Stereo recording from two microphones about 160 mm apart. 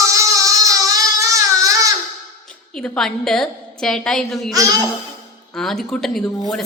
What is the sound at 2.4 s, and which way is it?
A woman's voice, 5° left (ahead or behind).